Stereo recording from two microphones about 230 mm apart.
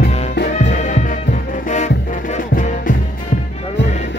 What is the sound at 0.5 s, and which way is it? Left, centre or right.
Music, left.